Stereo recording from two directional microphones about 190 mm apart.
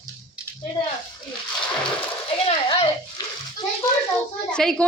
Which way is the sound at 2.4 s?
30° left (ahead or behind).